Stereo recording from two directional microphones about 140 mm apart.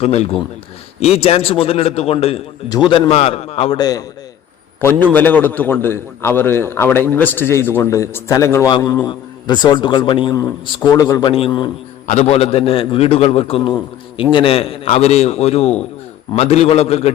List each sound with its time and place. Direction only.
0.0 s a man's voice: 50° left (ahead or behind)
2.6 s a man's voice: 30° left (ahead or behind)
3.1 s a man's voice: 45° left (ahead or behind)
3.8 s a man's voice: 25° left (ahead or behind)
4.8 s a man's voice: 15° left (ahead or behind)
9.0 s a man's voice: 30° left (ahead or behind)
10.8 s a man's voice: 25° left (ahead or behind)
11.3 s a man's voice: 40° left (ahead or behind)
12.0 s a man's voice: 55° left (ahead or behind)